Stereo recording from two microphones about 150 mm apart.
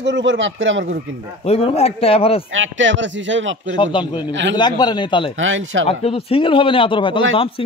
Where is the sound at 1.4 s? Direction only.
40° left (ahead or behind).